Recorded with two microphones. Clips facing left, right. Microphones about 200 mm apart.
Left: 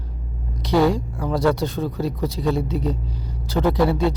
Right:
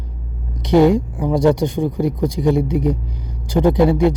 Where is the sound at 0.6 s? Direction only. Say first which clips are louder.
Right 6 dB; 20° right (ahead or behind).